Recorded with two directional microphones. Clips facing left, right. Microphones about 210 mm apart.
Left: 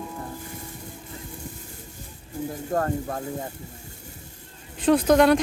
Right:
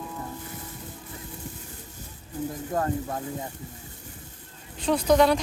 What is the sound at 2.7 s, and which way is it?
Speech, 45° left (ahead or behind).